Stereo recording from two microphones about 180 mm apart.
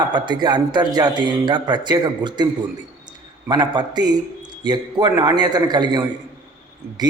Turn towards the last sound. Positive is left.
turn(degrees=-20)  # may be behind; listen again after turning